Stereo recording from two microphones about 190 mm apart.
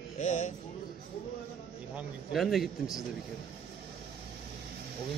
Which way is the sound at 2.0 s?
Centre (ahead or behind).